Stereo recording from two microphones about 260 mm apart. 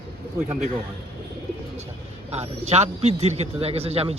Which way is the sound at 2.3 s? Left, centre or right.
Right.